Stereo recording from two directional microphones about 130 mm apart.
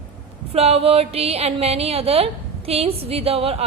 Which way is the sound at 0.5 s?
50° right (ahead or behind).